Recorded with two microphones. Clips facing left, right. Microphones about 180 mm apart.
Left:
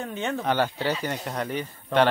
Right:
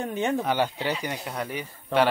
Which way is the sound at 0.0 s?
15° right (ahead or behind).